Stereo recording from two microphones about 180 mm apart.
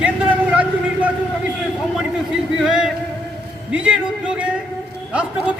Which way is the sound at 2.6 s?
5° right (ahead or behind).